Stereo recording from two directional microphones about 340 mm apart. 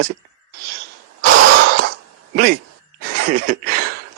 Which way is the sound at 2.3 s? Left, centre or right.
Right.